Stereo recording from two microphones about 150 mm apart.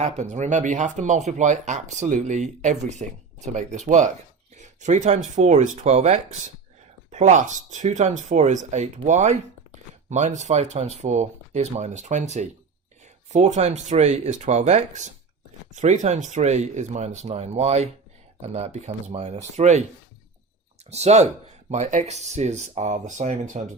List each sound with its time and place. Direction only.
0.0 s speech: 50° right (ahead or behind)
20.9 s speech: 45° right (ahead or behind)